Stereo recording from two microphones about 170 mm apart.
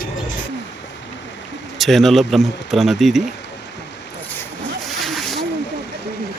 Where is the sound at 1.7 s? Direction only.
Centre (ahead or behind).